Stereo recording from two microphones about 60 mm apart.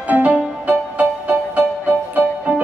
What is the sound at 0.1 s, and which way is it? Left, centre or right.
Music, right.